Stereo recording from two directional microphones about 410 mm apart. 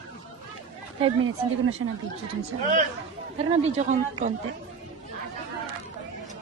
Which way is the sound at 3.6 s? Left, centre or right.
Centre.